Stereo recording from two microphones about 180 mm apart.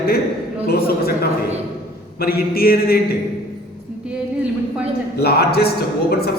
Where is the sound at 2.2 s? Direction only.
60° left (ahead or behind).